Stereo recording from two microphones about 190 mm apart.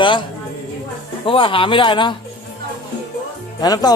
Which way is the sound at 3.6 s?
20° left (ahead or behind).